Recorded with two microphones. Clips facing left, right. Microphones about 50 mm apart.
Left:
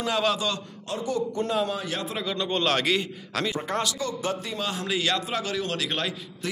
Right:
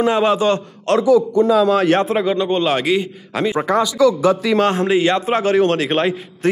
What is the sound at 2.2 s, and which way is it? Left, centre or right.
A man's voice, right.